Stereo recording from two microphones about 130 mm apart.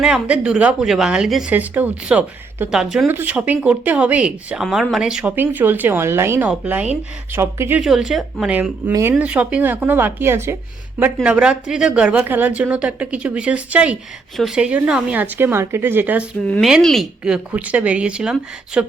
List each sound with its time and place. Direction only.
0.0 s a woman's voice: 5° right (ahead or behind)
3.1 s speech: 15° right (ahead or behind)
7.8 s a woman's voice: 5° right (ahead or behind)
8.9 s speech: 25° right (ahead or behind)
9.1 s speech: 10° right (ahead or behind)
11.0 s speech: 10° right (ahead or behind)
16.6 s speech: centre (ahead or behind)